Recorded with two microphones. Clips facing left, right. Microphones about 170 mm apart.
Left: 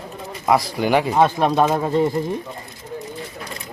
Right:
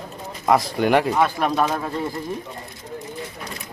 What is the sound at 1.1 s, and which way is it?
Speech, 25° left (ahead or behind).